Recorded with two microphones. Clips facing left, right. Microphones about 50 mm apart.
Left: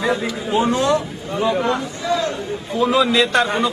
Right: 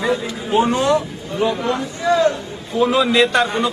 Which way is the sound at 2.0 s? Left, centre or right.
Right.